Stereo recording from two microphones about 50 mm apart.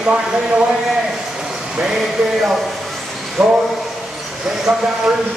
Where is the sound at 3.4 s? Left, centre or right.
Centre.